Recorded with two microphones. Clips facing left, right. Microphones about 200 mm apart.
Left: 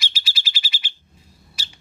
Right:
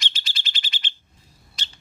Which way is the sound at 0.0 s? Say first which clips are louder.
Left 1 dB; 5° left (ahead or behind).